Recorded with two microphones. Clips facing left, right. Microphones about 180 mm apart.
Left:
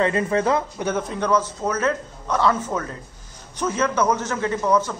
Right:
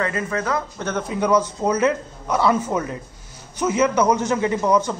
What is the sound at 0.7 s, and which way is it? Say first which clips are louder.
Speech: left 1 dB; 10° left (ahead or behind).